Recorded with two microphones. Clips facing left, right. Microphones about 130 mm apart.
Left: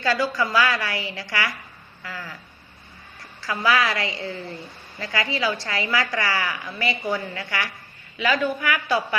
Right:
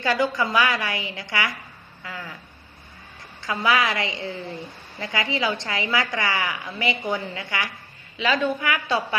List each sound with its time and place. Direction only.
0.0 s a woman's voice: 20° right (ahead or behind)
2.0 s a sound: 15° right (ahead or behind)
3.4 s a woman's voice: 20° right (ahead or behind)